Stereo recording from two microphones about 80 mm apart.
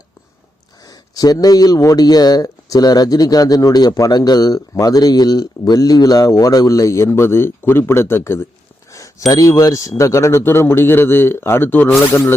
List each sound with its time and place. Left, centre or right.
0.9 s speech: left
8.9 s a sound: left
9.3 s a man's voice: left